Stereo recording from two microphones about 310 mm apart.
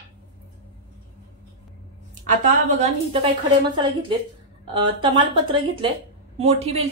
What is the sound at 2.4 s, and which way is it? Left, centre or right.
A woman's voice, right.